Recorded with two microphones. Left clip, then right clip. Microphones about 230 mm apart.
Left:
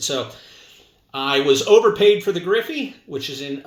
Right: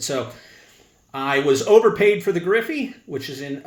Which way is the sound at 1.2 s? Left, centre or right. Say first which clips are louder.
Left 2 dB; right.